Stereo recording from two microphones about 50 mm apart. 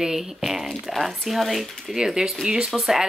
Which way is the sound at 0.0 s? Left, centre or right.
Centre.